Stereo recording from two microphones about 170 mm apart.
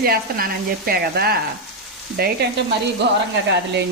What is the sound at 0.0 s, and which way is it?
Speech, 60° right (ahead or behind).